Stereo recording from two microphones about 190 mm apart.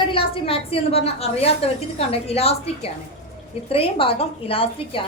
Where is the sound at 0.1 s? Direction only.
25° left (ahead or behind).